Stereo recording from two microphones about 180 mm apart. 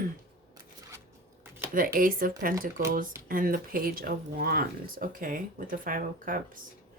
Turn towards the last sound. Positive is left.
turn(degrees=-50)  # may be behind; listen again after turning